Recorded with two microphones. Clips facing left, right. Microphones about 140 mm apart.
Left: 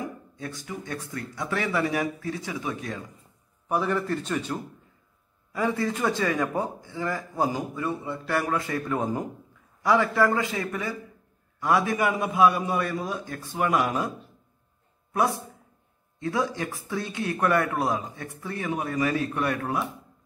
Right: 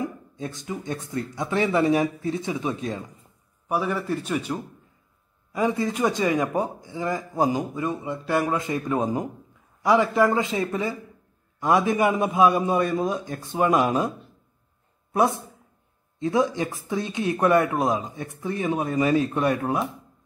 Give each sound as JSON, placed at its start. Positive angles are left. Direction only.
{"t": 0.0, "sound": "speech", "side_deg": -20}
{"t": 3.6, "sound": "a man's voice", "side_deg": -10}
{"t": 15.1, "sound": "speech", "side_deg": -20}